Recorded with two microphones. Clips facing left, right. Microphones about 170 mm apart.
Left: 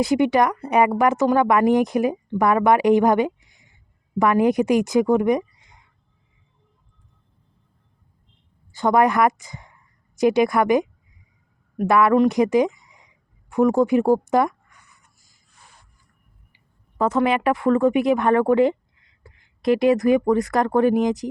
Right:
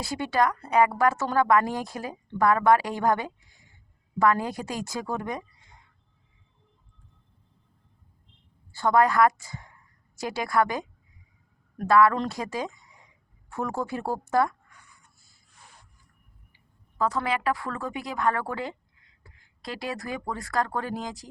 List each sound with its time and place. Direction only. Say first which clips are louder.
0.0 s speech: left 8 dB; 20° left (ahead or behind)
8.7 s a woman's voice: left 4 dB; 20° left (ahead or behind)
13.5 s a sound: left 13 dB; 15° left (ahead or behind)
17.0 s speech: left 8 dB; 20° left (ahead or behind)